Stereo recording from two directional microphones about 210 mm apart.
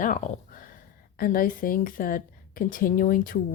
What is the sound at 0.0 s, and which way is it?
A woman's voice, 40° left (ahead or behind).